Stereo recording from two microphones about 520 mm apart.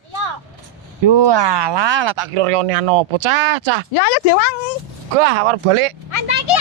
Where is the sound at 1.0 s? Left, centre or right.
Right.